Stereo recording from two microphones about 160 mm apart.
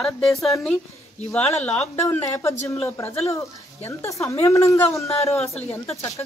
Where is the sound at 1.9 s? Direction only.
20° left (ahead or behind).